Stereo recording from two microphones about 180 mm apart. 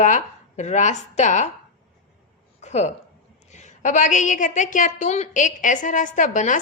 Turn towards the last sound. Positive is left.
turn(degrees=45)  # may be behind; listen again after turning